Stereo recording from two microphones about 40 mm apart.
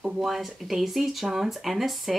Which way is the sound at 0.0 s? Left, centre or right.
Centre.